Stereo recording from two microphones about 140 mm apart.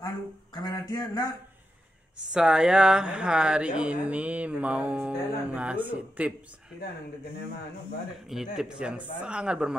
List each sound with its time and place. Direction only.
0.6 s speech: 25° left (ahead or behind)
2.3 s speech: 5° right (ahead or behind)
8.3 s speech: 5° right (ahead or behind)